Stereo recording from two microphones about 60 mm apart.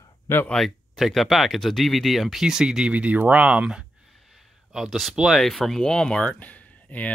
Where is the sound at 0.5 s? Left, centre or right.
Centre.